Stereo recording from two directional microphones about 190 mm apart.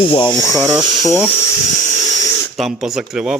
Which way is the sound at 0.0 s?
25° left (ahead or behind).